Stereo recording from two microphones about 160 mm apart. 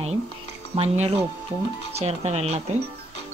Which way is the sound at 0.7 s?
40° right (ahead or behind).